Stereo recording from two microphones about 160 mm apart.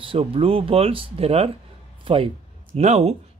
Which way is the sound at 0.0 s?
35° right (ahead or behind).